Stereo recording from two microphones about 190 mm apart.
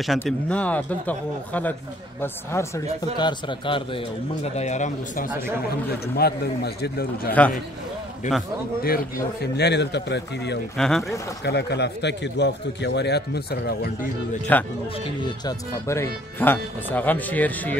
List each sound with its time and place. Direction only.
0.0 s speech: 5° left (ahead or behind)
3.2 s a man's voice: 25° left (ahead or behind); by 5.3 s 40° left (ahead or behind)
6.1 s a man's voice: 55° left (ahead or behind)
8.8 s a man's voice: 55° left (ahead or behind)
10.8 s speech: centre (ahead or behind)
11.4 s a man's voice: 60° left (ahead or behind)
15.0 s speech: 20° left (ahead or behind)